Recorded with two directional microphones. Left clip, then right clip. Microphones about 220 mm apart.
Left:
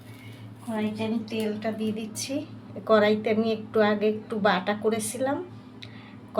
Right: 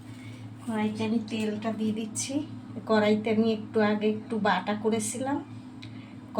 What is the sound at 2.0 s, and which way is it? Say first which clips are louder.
A woman's voice: even; 25° left (ahead or behind).